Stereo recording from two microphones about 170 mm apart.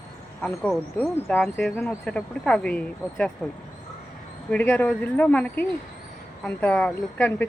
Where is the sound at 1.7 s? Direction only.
15° left (ahead or behind).